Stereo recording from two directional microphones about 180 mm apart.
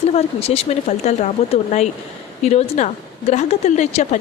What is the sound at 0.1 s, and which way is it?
A woman's voice, 35° left (ahead or behind).